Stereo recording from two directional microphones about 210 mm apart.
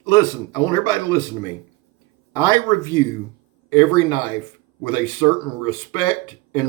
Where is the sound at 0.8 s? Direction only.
20° left (ahead or behind).